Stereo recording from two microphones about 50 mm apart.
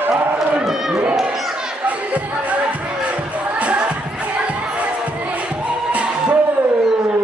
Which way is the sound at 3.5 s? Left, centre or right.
Right.